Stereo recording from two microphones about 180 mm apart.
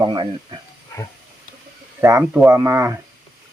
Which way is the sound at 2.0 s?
15° right (ahead or behind).